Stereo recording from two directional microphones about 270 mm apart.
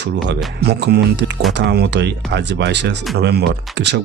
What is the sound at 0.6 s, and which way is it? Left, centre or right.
Speech, right.